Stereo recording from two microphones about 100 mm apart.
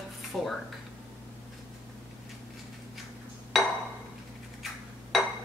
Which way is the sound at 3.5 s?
Centre (ahead or behind).